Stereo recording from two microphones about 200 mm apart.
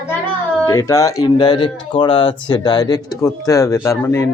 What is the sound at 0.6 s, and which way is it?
Speech, 15° left (ahead or behind).